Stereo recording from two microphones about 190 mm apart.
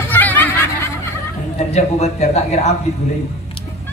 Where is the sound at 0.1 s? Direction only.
10° left (ahead or behind).